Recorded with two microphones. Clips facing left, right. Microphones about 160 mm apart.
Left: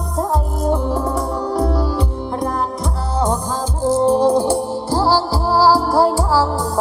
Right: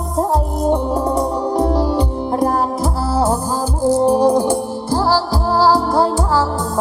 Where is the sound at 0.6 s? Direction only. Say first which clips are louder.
Right 2 dB; 35° right (ahead or behind).